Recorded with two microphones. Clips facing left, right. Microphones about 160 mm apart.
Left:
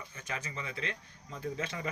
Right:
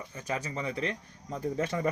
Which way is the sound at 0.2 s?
35° right (ahead or behind).